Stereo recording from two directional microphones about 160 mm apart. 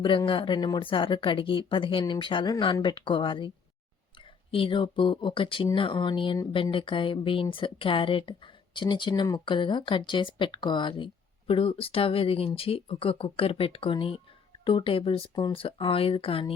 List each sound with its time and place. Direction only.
0.0 s speech: 30° left (ahead or behind)